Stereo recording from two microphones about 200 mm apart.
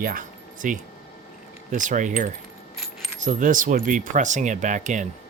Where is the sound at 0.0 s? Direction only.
45° right (ahead or behind).